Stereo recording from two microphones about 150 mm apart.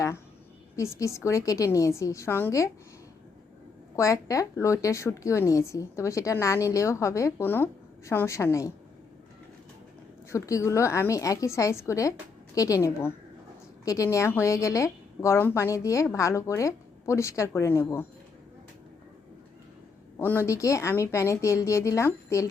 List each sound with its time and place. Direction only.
0.9 s a woman's voice: 20° left (ahead or behind)
3.9 s a woman's voice: 20° left (ahead or behind)
10.3 s a woman's voice: 20° left (ahead or behind)
20.1 s a woman's voice: 15° left (ahead or behind)